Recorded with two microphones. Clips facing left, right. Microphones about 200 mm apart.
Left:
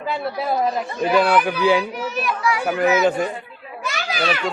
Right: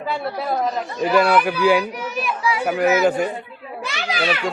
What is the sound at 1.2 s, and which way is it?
Speech, 10° right (ahead or behind).